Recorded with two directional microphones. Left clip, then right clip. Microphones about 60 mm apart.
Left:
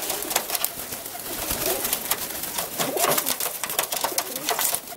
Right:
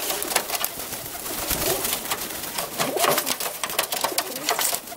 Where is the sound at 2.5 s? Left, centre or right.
Centre.